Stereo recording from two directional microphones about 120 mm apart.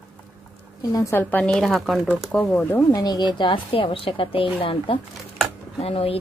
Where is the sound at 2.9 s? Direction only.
35° left (ahead or behind).